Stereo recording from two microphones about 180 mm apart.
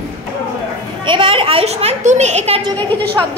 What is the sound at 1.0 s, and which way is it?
A child's voice, 30° right (ahead or behind).